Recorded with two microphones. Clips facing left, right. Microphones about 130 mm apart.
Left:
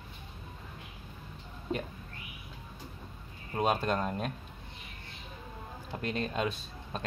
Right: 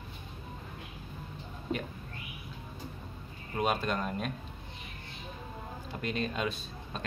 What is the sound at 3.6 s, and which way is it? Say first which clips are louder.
Speech: left 2 dB; 30° left (ahead or behind).